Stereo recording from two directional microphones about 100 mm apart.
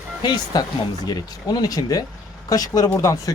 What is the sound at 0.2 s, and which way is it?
Speech, 45° left (ahead or behind).